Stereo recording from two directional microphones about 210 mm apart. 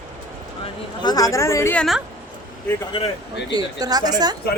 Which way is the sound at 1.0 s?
20° left (ahead or behind).